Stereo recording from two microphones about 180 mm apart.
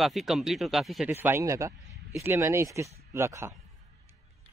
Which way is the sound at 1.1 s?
15° right (ahead or behind).